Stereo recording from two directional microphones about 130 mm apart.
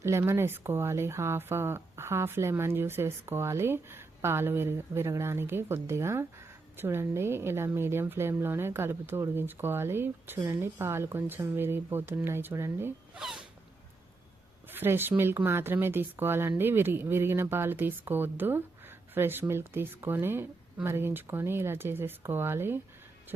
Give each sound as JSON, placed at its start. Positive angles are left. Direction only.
{"t": 0.0, "sound": "speech", "side_deg": -20}
{"t": 13.1, "sound": "speech", "side_deg": -5}
{"t": 14.7, "sound": "speech", "side_deg": -15}